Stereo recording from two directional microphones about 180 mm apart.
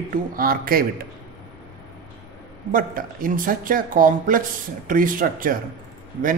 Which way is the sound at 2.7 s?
50° right (ahead or behind).